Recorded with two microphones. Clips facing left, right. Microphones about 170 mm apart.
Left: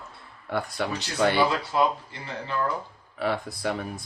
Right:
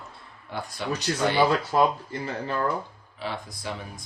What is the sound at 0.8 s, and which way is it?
Speech, 55° left (ahead or behind).